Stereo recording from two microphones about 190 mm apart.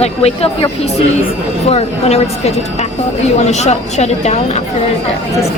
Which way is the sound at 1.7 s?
30° left (ahead or behind).